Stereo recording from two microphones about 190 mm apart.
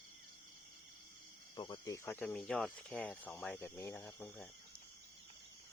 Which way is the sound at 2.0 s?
10° left (ahead or behind).